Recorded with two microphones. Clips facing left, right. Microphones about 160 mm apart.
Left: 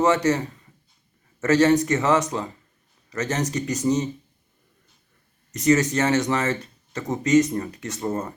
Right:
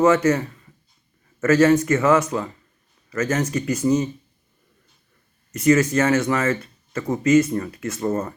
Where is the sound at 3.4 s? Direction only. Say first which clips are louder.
Right 3 dB; 40° left (ahead or behind).